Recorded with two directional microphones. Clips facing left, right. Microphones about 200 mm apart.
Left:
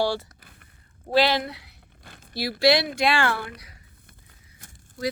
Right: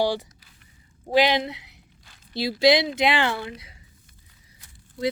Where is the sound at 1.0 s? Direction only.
15° right (ahead or behind).